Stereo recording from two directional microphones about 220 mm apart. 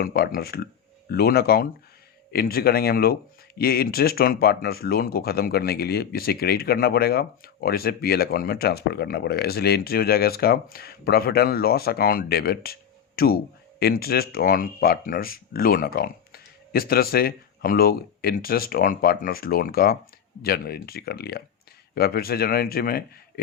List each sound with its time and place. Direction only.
0.0 s speech: 45° left (ahead or behind)